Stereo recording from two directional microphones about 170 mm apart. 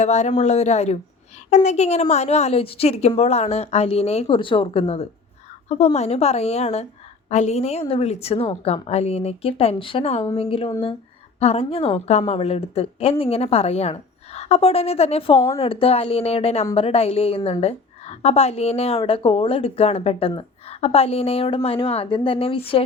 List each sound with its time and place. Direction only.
0.0 s a woman's voice: 45° left (ahead or behind)